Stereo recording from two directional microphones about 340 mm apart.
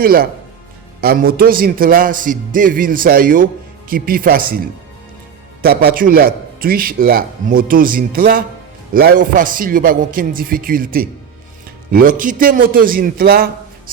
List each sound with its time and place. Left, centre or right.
0.0 s a man's voice: right
5.6 s a man's voice: right